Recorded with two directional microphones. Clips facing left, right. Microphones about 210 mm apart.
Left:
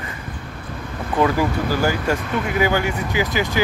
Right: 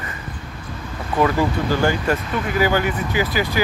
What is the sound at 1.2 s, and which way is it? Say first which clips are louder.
Speech: even; 10° left (ahead or behind).